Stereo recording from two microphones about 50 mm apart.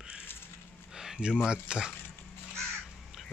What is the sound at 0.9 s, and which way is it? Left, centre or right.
Speech, centre.